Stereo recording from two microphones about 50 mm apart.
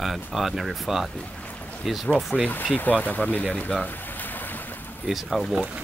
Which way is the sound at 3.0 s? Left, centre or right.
Left.